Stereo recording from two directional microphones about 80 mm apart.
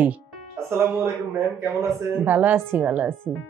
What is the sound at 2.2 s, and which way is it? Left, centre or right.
Speech, right.